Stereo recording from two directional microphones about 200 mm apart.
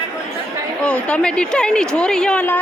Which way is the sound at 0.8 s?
5° left (ahead or behind).